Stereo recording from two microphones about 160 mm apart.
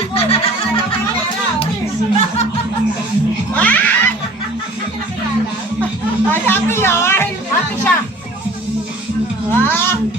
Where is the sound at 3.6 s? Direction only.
10° left (ahead or behind).